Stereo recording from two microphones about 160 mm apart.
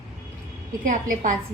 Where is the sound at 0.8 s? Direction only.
55° right (ahead or behind).